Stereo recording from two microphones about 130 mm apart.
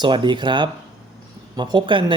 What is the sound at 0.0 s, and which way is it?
Speech, 35° right (ahead or behind).